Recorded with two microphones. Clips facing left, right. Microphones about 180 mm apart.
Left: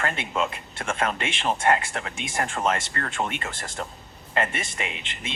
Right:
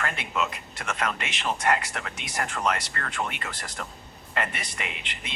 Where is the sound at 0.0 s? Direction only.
30° left (ahead or behind).